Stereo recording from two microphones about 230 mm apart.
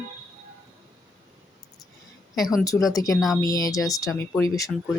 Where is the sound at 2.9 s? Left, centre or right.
Centre.